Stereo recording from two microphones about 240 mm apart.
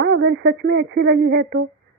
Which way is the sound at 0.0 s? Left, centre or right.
Right.